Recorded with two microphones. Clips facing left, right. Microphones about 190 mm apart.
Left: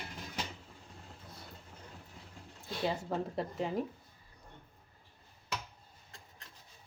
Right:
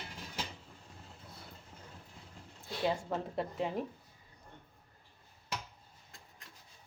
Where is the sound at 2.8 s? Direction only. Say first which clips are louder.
Right 1 dB; centre (ahead or behind).